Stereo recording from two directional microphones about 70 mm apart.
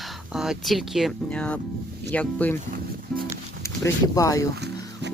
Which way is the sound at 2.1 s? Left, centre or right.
Left.